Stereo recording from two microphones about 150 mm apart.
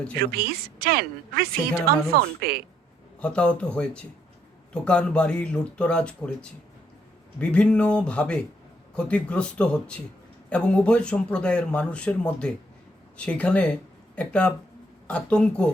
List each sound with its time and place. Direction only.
0.2 s a woman's voice: 90° right
3.2 s speech: 5° left (ahead or behind)
7.3 s speech: 10° left (ahead or behind)